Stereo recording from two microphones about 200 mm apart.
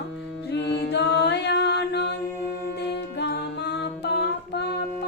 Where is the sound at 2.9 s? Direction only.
55° left (ahead or behind).